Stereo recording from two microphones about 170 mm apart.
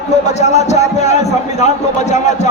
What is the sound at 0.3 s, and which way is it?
A man's voice, 40° left (ahead or behind).